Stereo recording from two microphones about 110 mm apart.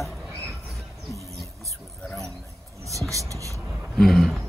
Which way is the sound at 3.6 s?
5° left (ahead or behind).